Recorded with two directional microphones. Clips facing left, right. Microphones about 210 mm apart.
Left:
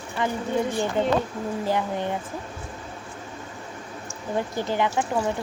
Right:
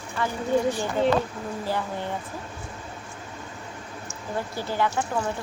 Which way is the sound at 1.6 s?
20° left (ahead or behind).